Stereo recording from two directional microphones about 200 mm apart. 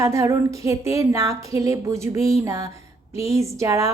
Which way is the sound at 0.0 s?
15° right (ahead or behind).